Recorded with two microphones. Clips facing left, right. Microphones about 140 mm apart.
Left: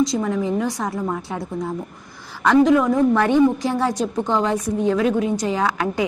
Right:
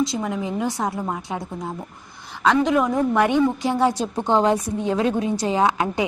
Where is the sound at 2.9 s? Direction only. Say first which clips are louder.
Left 2 dB; 15° right (ahead or behind).